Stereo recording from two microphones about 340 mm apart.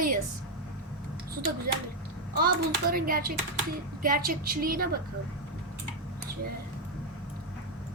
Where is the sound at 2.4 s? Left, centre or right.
Right.